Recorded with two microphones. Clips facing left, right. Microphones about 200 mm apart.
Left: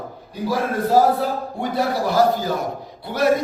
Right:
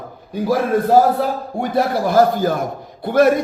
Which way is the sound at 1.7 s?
50° right (ahead or behind).